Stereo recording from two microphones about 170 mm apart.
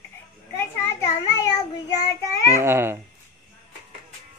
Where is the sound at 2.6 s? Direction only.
15° right (ahead or behind).